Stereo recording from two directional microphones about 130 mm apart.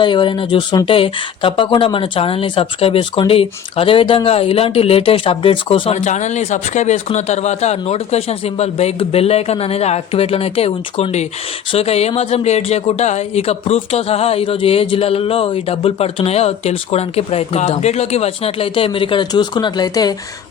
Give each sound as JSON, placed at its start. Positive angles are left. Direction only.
{"t": 0.0, "sound": "speech", "side_deg": 40}
{"t": 5.9, "sound": "speech", "side_deg": 60}